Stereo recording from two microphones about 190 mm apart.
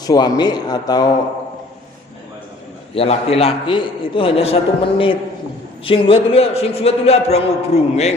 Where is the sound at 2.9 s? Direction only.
30° left (ahead or behind).